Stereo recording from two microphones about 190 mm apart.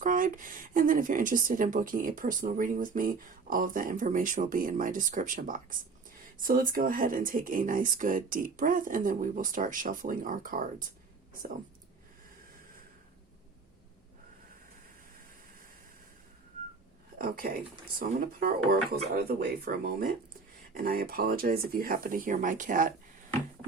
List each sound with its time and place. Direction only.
0.0 s speech: 45° right (ahead or behind)
17.2 s speech: 50° right (ahead or behind)